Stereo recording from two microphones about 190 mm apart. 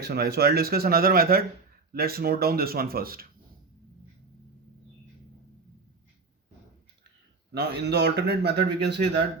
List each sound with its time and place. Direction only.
0.0 s speech: 55° right (ahead or behind)
7.5 s speech: 60° right (ahead or behind)